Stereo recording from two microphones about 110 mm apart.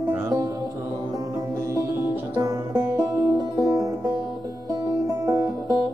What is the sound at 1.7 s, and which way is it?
Music, 30° right (ahead or behind).